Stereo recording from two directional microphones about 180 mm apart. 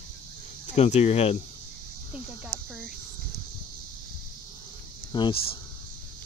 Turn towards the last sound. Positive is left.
turn(degrees=25)  # may be behind; listen again after turning